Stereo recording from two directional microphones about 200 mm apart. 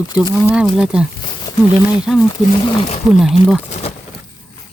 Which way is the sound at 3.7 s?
30° left (ahead or behind).